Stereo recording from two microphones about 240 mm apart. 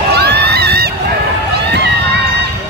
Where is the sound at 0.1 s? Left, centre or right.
Right.